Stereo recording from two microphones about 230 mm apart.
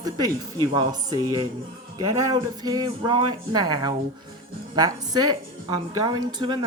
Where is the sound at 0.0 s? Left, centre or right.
Centre.